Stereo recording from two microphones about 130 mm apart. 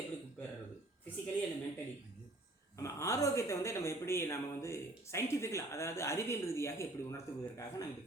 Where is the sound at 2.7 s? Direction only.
25° left (ahead or behind).